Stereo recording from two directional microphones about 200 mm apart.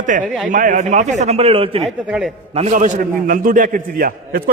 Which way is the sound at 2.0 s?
5° right (ahead or behind).